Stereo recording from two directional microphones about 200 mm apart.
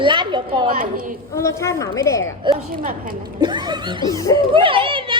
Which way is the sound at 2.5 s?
25° right (ahead or behind).